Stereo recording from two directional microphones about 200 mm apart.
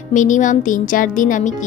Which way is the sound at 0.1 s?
40° left (ahead or behind).